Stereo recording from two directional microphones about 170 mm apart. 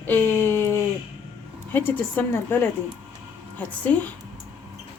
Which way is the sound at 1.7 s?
10° left (ahead or behind).